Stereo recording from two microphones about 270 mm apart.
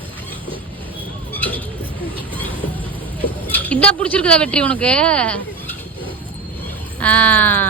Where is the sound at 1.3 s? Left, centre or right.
Centre.